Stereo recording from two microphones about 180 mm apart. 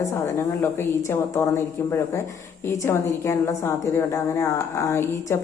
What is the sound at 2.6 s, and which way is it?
A woman's voice, 15° left (ahead or behind).